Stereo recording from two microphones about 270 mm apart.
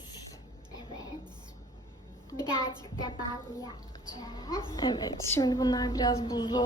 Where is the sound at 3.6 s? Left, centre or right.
Centre.